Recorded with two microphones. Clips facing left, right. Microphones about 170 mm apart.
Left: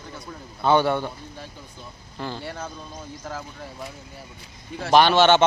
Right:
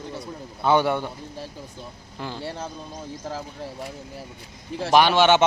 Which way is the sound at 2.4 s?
30° right (ahead or behind).